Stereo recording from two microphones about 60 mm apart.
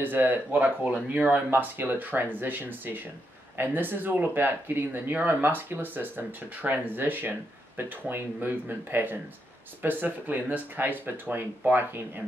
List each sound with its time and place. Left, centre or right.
0.0 s speech: right